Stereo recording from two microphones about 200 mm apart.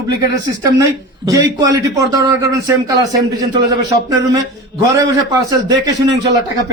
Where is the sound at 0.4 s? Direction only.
20° right (ahead or behind).